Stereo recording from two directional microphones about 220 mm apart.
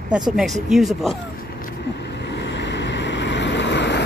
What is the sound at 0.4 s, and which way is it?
Speech, centre (ahead or behind).